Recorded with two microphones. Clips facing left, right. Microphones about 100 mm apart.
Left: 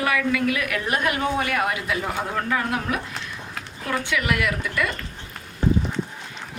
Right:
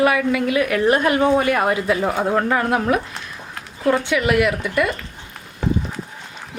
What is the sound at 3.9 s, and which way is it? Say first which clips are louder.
A woman's voice: right 7 dB; 25° right (ahead or behind).